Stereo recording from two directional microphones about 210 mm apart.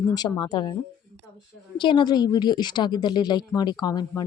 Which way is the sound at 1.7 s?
20° left (ahead or behind).